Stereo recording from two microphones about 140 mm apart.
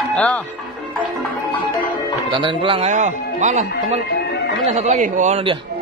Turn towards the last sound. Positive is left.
turn(degrees=-65)  # may be behind; listen again after turning